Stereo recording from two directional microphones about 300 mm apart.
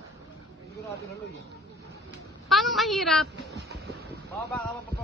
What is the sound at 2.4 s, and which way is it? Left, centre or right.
Speech, centre.